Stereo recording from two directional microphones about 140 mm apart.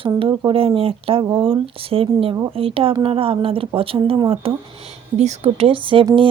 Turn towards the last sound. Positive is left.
turn(degrees=-40)  # may be behind; listen again after turning